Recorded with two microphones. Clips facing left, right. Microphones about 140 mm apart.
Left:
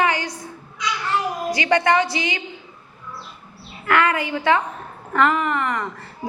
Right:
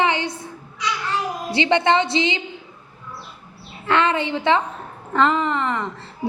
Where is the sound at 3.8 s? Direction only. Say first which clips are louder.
Even; 25° right (ahead or behind).